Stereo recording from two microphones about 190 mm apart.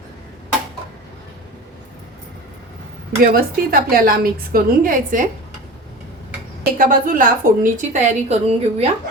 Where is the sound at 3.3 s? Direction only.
50° right (ahead or behind).